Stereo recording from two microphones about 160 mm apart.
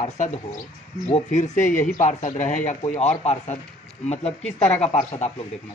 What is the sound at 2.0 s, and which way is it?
Speech, 50° left (ahead or behind).